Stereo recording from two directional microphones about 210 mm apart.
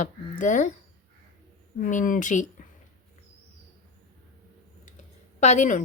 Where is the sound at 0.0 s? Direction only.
35° left (ahead or behind).